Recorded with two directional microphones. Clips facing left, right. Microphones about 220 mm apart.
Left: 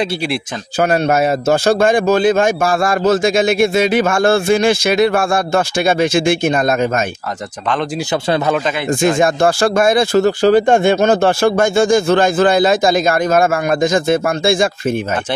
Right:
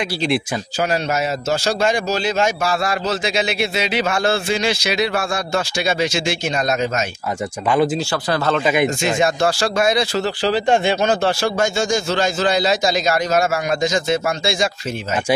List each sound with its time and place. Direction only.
0.7 s a man's voice: 55° left (ahead or behind)
8.1 s speech: 20° left (ahead or behind)
8.6 s speech: 15° right (ahead or behind)
9.0 s a man's voice: 50° left (ahead or behind)